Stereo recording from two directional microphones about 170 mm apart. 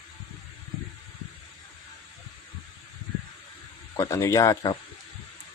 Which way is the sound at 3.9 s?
15° left (ahead or behind).